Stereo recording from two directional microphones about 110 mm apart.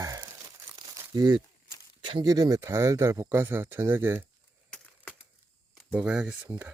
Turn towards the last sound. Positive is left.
turn(degrees=-25)  # may be behind; listen again after turning